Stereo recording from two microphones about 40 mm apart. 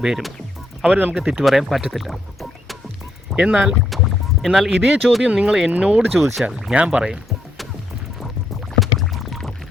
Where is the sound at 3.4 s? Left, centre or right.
Right.